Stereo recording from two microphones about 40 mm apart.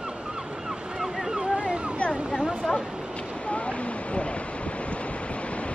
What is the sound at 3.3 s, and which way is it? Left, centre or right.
Waves, left.